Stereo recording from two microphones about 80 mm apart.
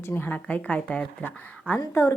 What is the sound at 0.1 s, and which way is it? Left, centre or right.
Speech, left.